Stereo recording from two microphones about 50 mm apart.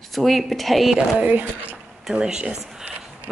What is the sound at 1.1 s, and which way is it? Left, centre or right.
Speech, right.